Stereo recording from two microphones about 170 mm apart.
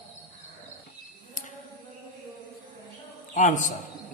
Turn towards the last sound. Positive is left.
turn(degrees=50)  # may be behind; listen again after turning